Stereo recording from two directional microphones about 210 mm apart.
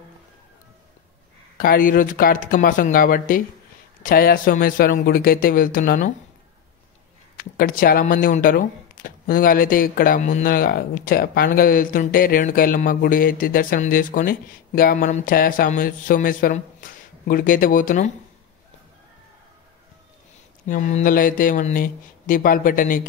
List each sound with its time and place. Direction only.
1.6 s a man's voice: 40° left (ahead or behind)
7.3 s speech: 40° left (ahead or behind)
20.6 s speech: 35° left (ahead or behind)